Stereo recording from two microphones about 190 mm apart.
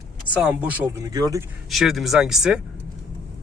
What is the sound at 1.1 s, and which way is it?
Speech, 20° right (ahead or behind).